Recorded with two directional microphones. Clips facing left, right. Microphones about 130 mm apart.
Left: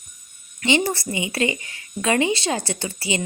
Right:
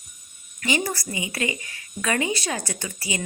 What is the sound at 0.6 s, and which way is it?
A woman's voice, 25° left (ahead or behind).